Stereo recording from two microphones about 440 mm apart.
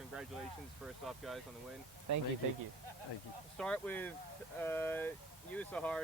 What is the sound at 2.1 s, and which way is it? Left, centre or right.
Speech, right.